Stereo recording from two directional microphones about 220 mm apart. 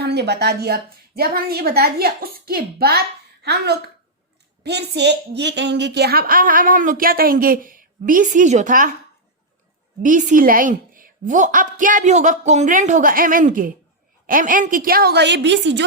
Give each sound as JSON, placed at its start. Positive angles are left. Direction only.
{"t": 0.0, "sound": "a woman's voice", "side_deg": -50}
{"t": 10.0, "sound": "a woman's voice", "side_deg": -35}